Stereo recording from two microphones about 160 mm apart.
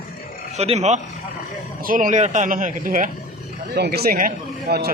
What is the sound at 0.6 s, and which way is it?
Speech, 45° right (ahead or behind).